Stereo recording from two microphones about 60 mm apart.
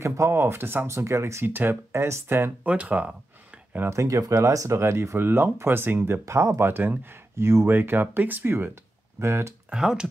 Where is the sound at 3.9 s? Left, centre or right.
Right.